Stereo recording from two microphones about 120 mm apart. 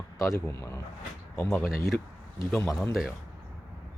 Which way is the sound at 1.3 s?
20° left (ahead or behind).